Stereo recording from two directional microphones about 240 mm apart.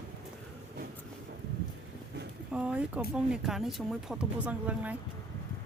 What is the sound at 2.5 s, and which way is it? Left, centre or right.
Speech, centre.